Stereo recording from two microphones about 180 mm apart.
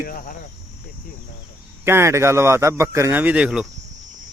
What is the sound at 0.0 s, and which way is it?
Speech, 50° left (ahead or behind).